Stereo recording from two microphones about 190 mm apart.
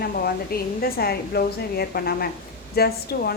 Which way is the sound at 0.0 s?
55° left (ahead or behind).